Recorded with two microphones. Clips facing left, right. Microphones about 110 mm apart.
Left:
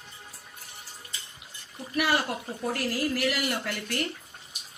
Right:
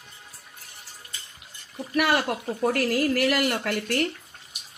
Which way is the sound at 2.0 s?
60° right (ahead or behind).